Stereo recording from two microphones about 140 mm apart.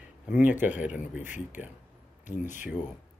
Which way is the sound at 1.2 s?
60° left (ahead or behind).